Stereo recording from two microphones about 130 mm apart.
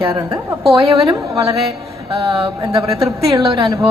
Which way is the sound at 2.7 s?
25° right (ahead or behind).